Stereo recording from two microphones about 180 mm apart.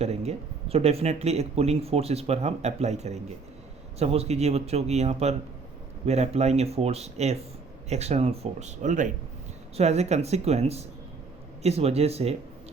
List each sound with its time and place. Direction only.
0.0 s speech: 35° right (ahead or behind)